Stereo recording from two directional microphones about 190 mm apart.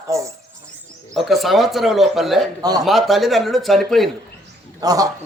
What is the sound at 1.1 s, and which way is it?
Speech, centre (ahead or behind).